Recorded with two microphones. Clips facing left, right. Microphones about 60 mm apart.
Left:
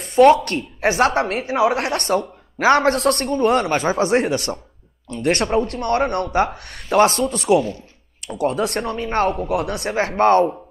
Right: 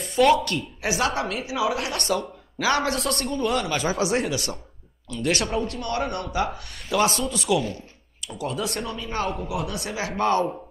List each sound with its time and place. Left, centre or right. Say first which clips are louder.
0.0 s a sound: left 7 dB; left
0.5 s speech: left 6 dB; left
1.0 s speech: left 7 dB; left
5.1 s speech: left 5 dB; left
5.4 s speech: left 7 dB; left